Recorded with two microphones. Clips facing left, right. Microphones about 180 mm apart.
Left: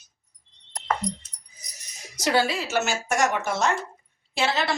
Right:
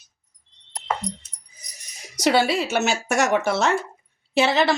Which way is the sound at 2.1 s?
70° right (ahead or behind).